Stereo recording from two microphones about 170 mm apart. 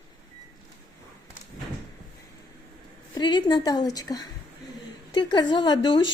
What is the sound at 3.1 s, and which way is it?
Speech, 25° left (ahead or behind).